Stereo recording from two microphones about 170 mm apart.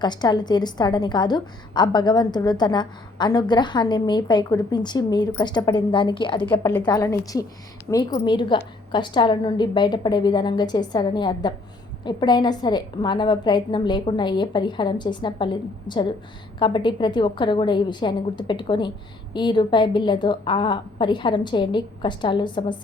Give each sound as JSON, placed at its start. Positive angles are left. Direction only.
{"t": 0.0, "sound": "a woman's voice", "side_deg": 25}
{"t": 6.6, "sound": "a woman's voice", "side_deg": 10}